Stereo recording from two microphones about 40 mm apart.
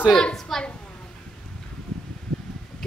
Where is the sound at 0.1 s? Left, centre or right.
Centre.